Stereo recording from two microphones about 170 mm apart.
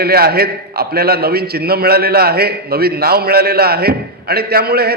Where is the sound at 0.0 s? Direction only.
65° right (ahead or behind).